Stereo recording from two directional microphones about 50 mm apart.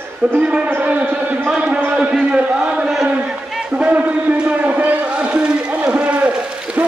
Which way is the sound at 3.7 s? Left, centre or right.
Right.